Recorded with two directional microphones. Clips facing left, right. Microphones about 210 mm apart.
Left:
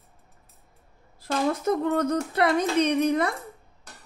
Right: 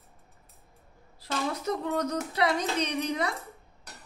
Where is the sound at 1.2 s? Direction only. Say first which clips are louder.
Left 6 dB; 50° left (ahead or behind).